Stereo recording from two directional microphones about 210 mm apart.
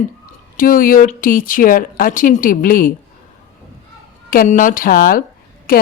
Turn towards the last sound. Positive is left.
turn(degrees=45)  # may be behind; listen again after turning